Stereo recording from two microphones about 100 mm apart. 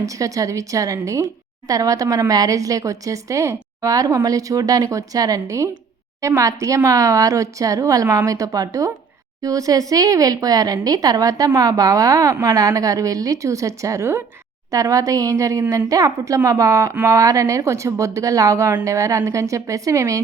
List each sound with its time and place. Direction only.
0.0 s a woman's voice: 35° right (ahead or behind)